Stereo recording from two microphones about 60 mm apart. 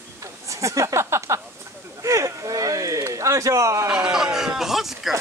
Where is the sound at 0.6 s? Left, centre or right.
Right.